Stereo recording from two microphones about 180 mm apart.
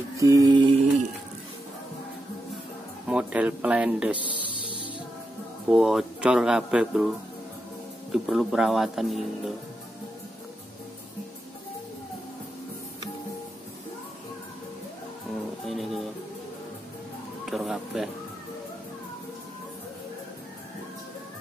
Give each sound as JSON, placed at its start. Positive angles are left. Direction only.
{"t": 0.2, "sound": "music", "side_deg": -20}
{"t": 3.1, "sound": "speech", "side_deg": -5}
{"t": 5.7, "sound": "speech", "side_deg": -5}
{"t": 8.1, "sound": "speech", "side_deg": 0}
{"t": 15.6, "sound": "music", "side_deg": 0}
{"t": 17.5, "sound": "a sound", "side_deg": 0}